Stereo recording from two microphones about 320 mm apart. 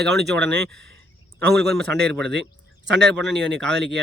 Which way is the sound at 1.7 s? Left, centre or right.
Centre.